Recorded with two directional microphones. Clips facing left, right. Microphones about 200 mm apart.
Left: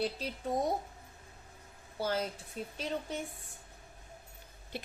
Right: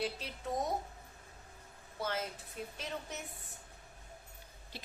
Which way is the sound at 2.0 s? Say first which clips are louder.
Left 4 dB; 30° left (ahead or behind).